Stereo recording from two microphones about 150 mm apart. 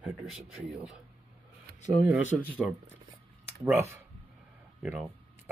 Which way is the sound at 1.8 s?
55° left (ahead or behind).